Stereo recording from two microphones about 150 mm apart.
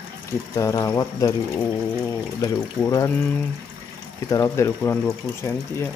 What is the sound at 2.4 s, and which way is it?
Speech, 20° left (ahead or behind).